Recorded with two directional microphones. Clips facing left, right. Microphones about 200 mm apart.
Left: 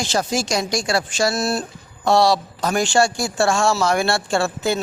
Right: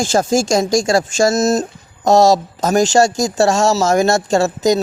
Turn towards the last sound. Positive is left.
turn(degrees=-40)  # may be behind; listen again after turning